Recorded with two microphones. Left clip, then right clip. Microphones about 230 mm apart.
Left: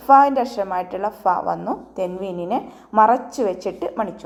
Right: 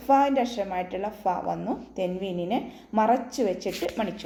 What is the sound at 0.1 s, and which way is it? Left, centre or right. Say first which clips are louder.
A woman's voice: left 8 dB; centre.